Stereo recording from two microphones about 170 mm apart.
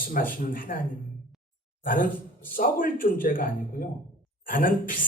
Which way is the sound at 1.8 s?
55° left (ahead or behind).